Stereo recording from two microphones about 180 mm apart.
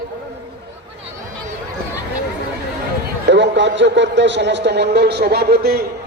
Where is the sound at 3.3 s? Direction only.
80° right; by 5.9 s 60° right (ahead or behind).